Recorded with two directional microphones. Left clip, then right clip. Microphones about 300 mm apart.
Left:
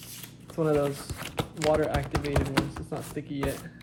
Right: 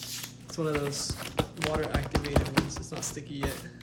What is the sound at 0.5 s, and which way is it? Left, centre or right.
Speech, centre.